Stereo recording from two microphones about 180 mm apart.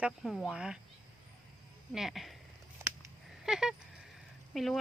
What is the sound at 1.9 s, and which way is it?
Speech, centre (ahead or behind).